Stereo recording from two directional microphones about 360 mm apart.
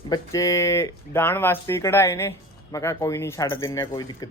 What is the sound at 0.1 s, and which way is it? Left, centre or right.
Speech, centre.